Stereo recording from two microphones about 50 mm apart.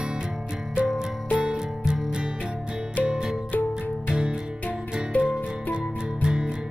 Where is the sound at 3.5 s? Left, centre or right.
Left.